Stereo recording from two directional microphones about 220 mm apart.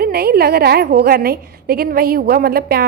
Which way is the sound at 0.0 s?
45° right (ahead or behind).